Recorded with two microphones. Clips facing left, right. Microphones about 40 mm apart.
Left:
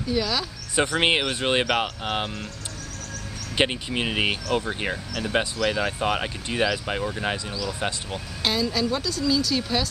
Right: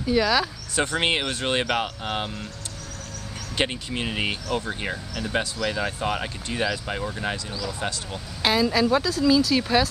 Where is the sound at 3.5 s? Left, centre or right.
Centre.